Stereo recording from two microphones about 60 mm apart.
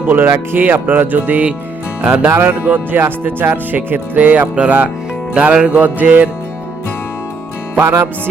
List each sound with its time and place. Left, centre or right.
0.0 s speech: right
2.2 s speech: right
2.6 s speech: right
7.8 s music: right